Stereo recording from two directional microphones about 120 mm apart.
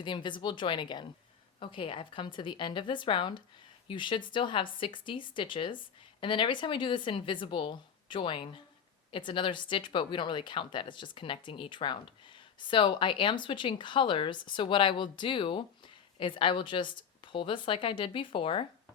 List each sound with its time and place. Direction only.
0.0 s a woman's voice: 40° left (ahead or behind)